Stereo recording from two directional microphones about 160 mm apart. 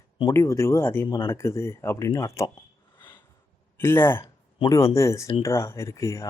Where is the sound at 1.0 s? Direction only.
30° left (ahead or behind).